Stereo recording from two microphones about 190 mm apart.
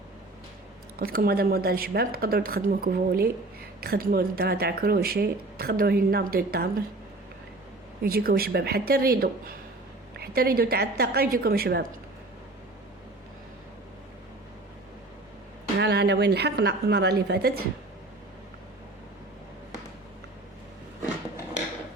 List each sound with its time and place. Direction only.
0.9 s speech: 50° right (ahead or behind)
8.0 s speech: 55° right (ahead or behind)
15.8 s a woman's voice: 60° right (ahead or behind)